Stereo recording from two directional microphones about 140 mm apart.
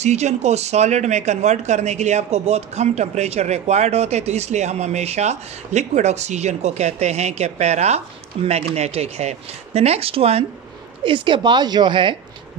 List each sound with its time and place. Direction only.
0.0 s speech: 55° right (ahead or behind); by 12.2 s 35° right (ahead or behind)